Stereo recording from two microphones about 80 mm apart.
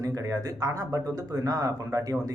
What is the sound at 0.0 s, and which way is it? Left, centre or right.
Speech, right.